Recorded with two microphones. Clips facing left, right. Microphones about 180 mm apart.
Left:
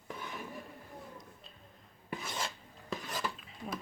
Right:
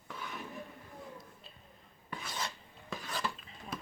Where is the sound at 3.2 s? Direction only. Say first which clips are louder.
Even; 5° left (ahead or behind).